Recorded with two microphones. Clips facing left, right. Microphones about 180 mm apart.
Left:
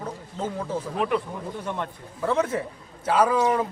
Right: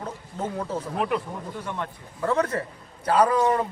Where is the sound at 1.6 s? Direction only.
20° left (ahead or behind).